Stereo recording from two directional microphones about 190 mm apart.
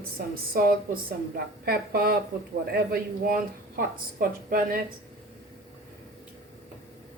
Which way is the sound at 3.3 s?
45° right (ahead or behind).